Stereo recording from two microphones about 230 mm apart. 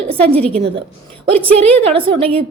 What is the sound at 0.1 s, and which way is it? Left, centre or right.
Speech, right.